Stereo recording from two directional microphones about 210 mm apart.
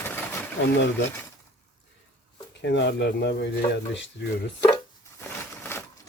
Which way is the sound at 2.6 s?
55° left (ahead or behind).